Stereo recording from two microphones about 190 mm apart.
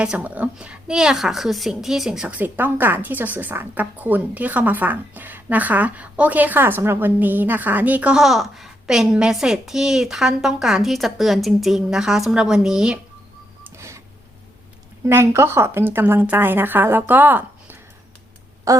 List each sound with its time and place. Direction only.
0.0 s a woman's voice: 5° right (ahead or behind)
13.7 s printer: 15° right (ahead or behind)
15.0 s speech: 15° right (ahead or behind)